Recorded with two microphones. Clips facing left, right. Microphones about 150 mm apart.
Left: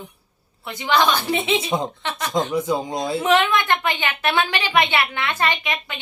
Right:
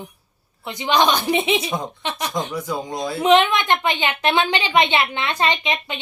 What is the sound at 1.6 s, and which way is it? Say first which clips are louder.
Speech: left 3 dB; 25° left (ahead or behind).